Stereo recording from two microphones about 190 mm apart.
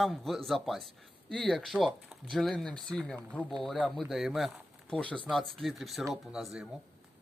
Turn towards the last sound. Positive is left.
turn(degrees=-5)  # may be behind; listen again after turning